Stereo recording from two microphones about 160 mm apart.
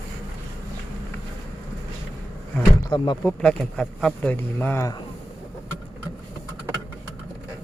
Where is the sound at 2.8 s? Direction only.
25° left (ahead or behind).